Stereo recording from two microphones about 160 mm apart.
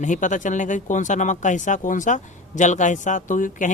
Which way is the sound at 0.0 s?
50° left (ahead or behind).